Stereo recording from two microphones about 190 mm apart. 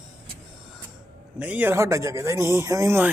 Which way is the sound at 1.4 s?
10° right (ahead or behind).